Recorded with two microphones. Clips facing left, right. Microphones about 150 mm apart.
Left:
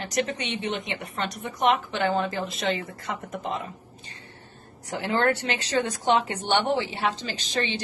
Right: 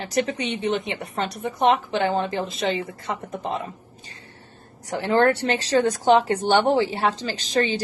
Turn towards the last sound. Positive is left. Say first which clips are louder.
# right 6 dB
turn(degrees=-40)  # may be behind; listen again after turning